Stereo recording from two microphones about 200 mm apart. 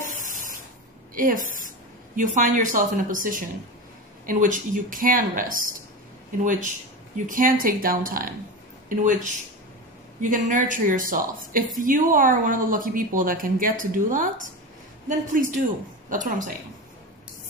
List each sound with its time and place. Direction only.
0.2 s spray: 40° right (ahead or behind)
1.1 s a woman's voice: 40° right (ahead or behind)
10.3 s speech: 40° right (ahead or behind)